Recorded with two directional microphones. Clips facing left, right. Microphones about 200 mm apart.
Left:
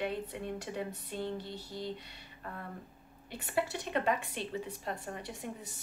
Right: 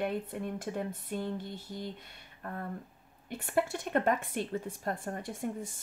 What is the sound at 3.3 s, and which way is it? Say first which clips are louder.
Speech: right 3 dB; 50° right (ahead or behind).